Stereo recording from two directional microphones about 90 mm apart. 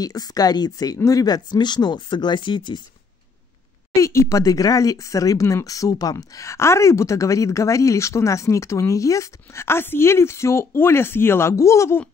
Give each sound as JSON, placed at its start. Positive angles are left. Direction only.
{"t": 0.0, "sound": "speech", "side_deg": 45}
{"t": 0.9, "sound": "speech", "side_deg": 35}
{"t": 1.2, "sound": "speech", "side_deg": 50}
{"t": 3.9, "sound": "speech", "side_deg": 30}